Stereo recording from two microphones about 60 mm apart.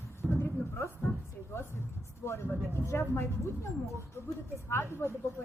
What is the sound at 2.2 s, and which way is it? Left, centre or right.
A woman's voice, left.